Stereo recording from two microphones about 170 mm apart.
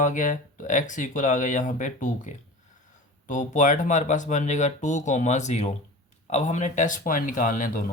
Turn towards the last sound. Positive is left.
turn(degrees=55)  # may be behind; listen again after turning